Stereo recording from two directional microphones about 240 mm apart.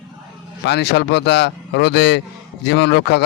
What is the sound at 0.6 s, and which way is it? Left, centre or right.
Speech, left.